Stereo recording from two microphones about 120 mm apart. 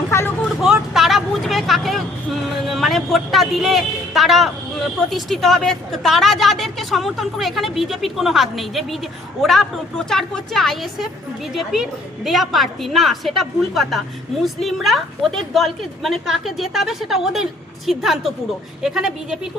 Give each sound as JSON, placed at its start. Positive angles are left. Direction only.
{"t": 0.1, "sound": "vehicle", "side_deg": 20}
{"t": 0.6, "sound": "vehicle", "side_deg": -5}
{"t": 2.6, "sound": "a woman's voice", "side_deg": 0}